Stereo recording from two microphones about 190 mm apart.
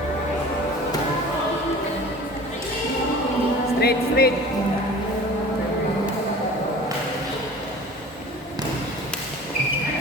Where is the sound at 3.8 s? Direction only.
55° left (ahead or behind).